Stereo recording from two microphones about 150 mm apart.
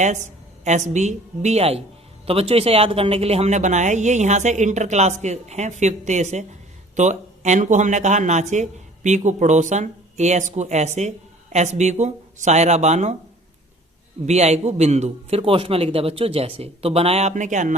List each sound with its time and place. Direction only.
0.0 s a woman's voice: 50° right (ahead or behind)
14.3 s speech: 45° right (ahead or behind)